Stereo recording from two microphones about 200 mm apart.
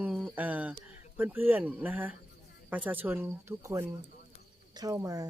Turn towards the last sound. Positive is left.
turn(degrees=-15)  # may be behind; listen again after turning